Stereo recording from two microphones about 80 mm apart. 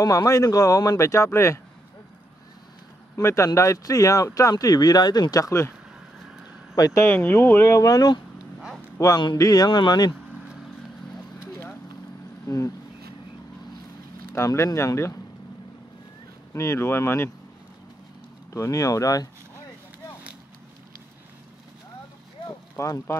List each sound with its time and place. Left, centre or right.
0.0 s speech: left
3.2 s speech: left
6.7 s speech: left
7.7 s speech: left
8.5 s vehicle: centre
8.9 s a man's voice: left
9.7 s speech: left
12.4 s speech: left
14.3 s speech: left
16.5 s speech: left
18.5 s speech: left
22.8 s speech: left